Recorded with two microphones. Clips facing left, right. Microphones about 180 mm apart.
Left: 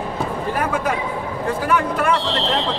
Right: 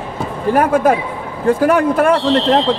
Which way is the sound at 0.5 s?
50° right (ahead or behind).